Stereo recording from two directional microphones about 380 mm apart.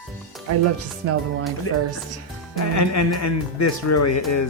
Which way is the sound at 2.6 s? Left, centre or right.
Left.